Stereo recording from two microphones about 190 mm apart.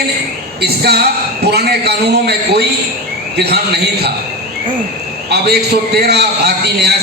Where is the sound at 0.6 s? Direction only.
60° right (ahead or behind).